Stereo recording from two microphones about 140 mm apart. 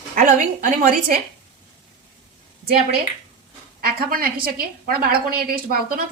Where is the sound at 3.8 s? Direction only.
90° right.